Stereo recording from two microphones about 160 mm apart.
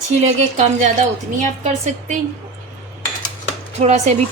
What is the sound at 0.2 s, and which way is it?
A woman's voice, 45° right (ahead or behind).